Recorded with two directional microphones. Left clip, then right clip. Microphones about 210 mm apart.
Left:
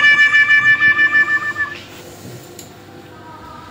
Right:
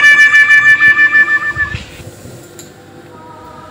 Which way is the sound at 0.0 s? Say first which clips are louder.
Right 5 dB; 20° right (ahead or behind).